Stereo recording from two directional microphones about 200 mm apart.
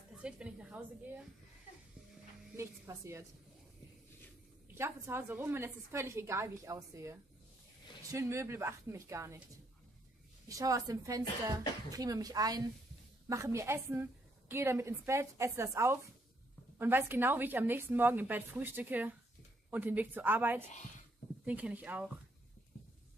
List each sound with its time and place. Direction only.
0.2 s a woman's voice: 5° right (ahead or behind)
2.5 s a woman's voice: 15° right (ahead or behind)
4.7 s a woman's voice: 15° right (ahead or behind)
10.5 s a woman's voice: 15° right (ahead or behind)